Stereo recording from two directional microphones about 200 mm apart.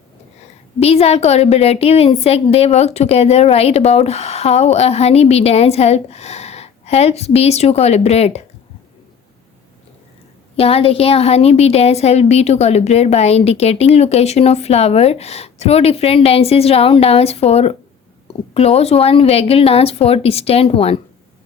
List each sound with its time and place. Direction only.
0.8 s a woman's voice: 30° left (ahead or behind)
10.6 s a woman's voice: 30° left (ahead or behind)